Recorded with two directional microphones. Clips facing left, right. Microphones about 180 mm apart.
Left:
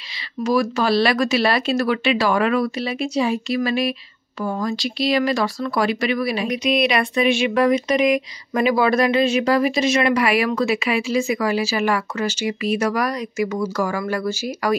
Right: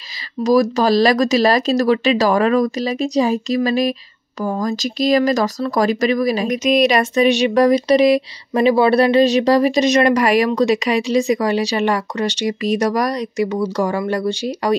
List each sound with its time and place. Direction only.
0.4 s speech: 35° right (ahead or behind)